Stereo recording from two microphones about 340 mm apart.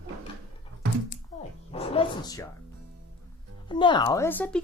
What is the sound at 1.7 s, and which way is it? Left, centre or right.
Speech, centre.